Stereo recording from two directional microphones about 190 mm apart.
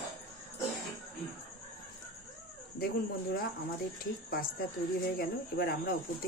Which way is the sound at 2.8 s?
55° left (ahead or behind).